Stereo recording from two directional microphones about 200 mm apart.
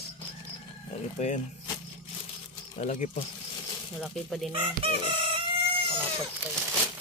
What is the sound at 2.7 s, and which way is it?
Speech, 35° left (ahead or behind).